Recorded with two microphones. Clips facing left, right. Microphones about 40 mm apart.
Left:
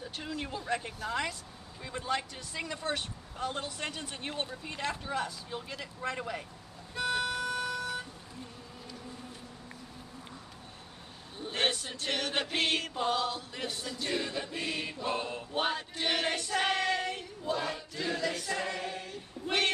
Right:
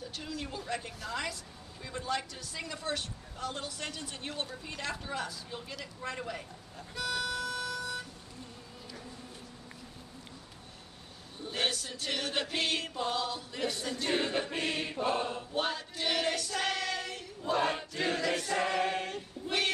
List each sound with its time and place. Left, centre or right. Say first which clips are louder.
0.1 s speech: left 3 dB; left
4.6 s choir: left 2 dB; centre
5.8 s speech: left 3 dB; left
7.0 s music: left 3 dB; left
7.8 s vehicle: left 2 dB; left
11.4 s a sound: left 2 dB; left
12.3 s choir: left 2 dB; centre
13.9 s mantra: right 2 dB; right
15.5 s choir: left 4 dB; centre
17.6 s choir: right 4 dB; right